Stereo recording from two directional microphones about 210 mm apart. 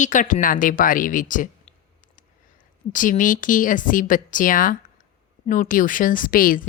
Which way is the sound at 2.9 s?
40° left (ahead or behind).